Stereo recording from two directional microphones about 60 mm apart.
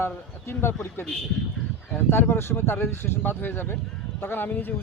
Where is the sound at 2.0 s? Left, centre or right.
Left.